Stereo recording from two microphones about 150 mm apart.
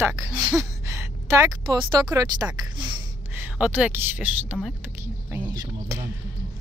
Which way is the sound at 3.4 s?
10° right (ahead or behind).